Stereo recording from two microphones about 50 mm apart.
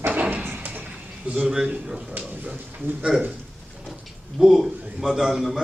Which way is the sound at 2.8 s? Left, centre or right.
Right.